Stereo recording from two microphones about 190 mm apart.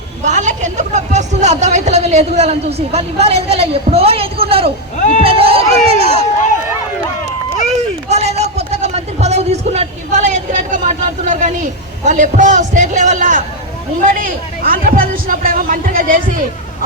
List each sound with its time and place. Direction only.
0.3 s a woman's voice: 40° right (ahead or behind)
8.1 s a sound: 35° right (ahead or behind)
12.0 s a woman's voice: 40° right (ahead or behind)